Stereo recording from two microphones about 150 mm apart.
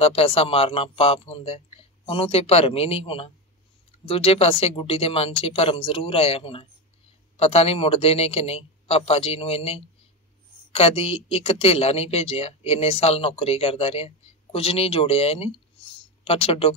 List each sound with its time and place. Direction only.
0.0 s speech: 40° left (ahead or behind)